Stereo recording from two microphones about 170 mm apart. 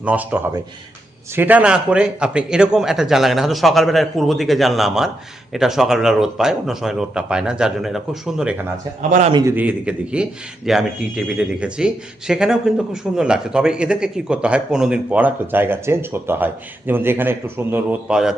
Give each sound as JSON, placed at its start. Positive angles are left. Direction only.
{"t": 0.0, "sound": "a man's voice", "side_deg": -10}
{"t": 9.0, "sound": "a man's voice", "side_deg": -45}
{"t": 9.3, "sound": "a man's voice", "side_deg": -15}